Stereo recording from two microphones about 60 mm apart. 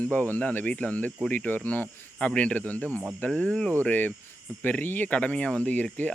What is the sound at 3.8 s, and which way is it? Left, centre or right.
Speech, left.